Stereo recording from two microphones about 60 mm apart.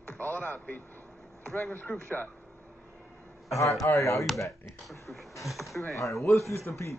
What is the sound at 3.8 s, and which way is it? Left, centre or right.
Speech, left.